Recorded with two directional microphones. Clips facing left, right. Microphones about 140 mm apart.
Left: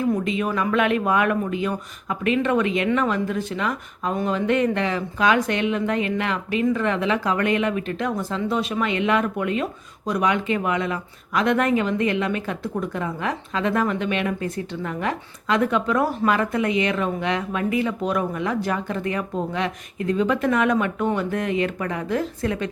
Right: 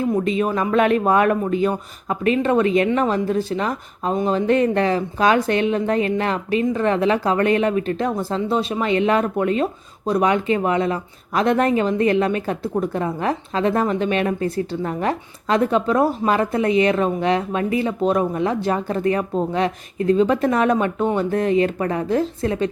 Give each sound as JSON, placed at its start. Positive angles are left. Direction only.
{"t": 0.3, "sound": "speech", "side_deg": -35}